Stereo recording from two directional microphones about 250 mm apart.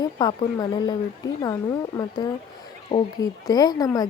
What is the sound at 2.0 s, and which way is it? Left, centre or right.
Speech, centre.